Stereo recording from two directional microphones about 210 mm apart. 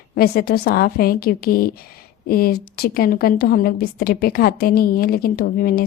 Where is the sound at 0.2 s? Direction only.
45° left (ahead or behind).